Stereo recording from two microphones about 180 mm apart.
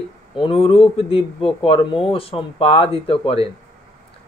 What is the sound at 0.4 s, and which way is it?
Speech, 30° left (ahead or behind).